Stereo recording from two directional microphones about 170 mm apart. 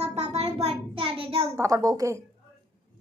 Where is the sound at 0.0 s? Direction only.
40° right (ahead or behind).